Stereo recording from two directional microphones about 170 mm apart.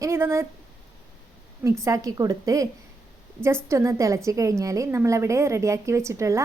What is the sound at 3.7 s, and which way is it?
A woman's voice, 15° right (ahead or behind).